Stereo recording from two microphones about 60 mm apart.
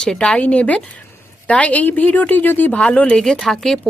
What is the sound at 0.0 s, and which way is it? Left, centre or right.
A woman's voice, centre.